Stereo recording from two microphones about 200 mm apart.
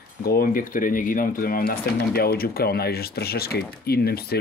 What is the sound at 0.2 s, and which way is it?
Speech, 50° left (ahead or behind).